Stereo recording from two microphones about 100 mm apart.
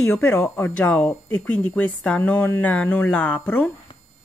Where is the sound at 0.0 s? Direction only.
10° left (ahead or behind).